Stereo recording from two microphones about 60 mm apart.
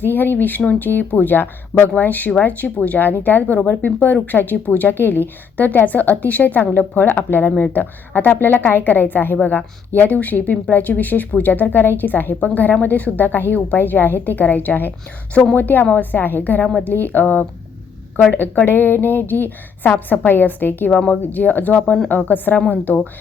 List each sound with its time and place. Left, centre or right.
0.0 s a woman's voice: left
20.9 s a woman's voice: left